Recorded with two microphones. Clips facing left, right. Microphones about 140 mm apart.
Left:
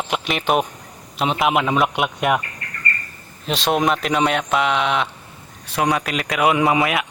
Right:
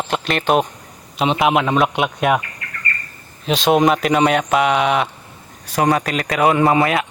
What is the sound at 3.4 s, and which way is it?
Speech, centre (ahead or behind).